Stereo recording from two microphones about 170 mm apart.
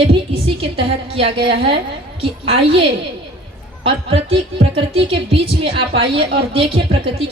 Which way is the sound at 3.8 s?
35° right (ahead or behind).